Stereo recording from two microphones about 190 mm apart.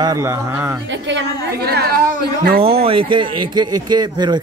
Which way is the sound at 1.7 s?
55° right (ahead or behind).